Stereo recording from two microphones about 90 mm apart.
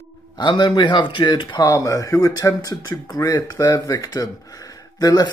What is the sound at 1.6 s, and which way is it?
Speech, 35° left (ahead or behind).